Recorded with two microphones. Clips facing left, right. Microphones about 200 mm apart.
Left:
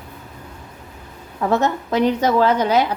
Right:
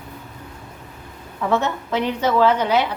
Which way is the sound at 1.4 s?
40° left (ahead or behind).